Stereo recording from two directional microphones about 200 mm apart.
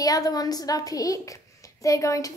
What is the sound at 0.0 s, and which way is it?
A woman's voice, 20° left (ahead or behind).